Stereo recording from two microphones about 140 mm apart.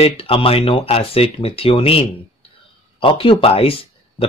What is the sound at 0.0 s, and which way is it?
Speech, 40° left (ahead or behind).